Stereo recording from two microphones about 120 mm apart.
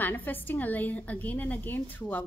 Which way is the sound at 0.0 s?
15° left (ahead or behind).